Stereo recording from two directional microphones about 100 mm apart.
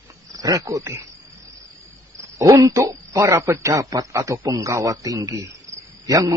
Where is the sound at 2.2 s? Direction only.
30° right (ahead or behind).